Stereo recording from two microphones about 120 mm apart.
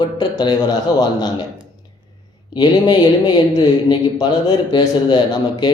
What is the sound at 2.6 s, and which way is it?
Speech, 40° left (ahead or behind).